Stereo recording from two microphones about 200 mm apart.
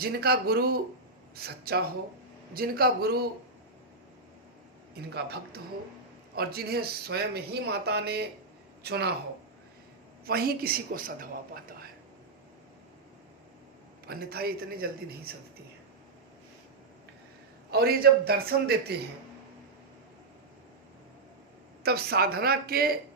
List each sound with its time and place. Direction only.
0.0 s speech: 50° right (ahead or behind)
4.9 s speech: 55° right (ahead or behind)
10.2 s speech: 50° right (ahead or behind)
14.1 s speech: 50° right (ahead or behind)
17.7 s speech: 50° right (ahead or behind)
21.8 s speech: 50° right (ahead or behind)